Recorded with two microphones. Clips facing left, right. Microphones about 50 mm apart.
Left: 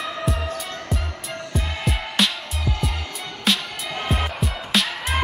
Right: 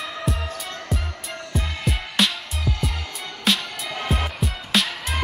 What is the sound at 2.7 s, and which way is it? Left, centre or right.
Music, left.